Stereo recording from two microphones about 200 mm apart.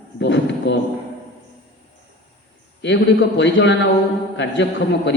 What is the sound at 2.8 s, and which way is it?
Speech, 60° left (ahead or behind).